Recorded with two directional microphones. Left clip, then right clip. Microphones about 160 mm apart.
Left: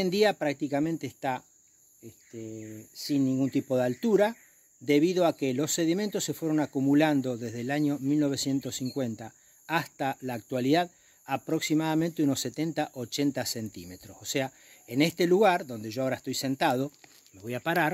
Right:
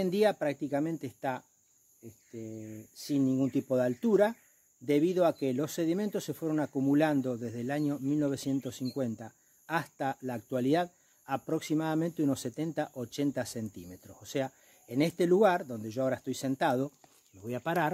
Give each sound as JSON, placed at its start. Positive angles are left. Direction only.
{"t": 0.0, "sound": "speech", "side_deg": 25}